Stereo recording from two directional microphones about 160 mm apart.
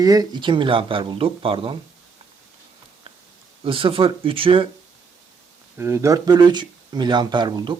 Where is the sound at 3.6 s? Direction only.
35° right (ahead or behind).